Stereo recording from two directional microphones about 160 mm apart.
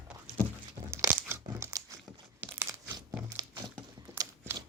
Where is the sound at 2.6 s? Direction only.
15° right (ahead or behind).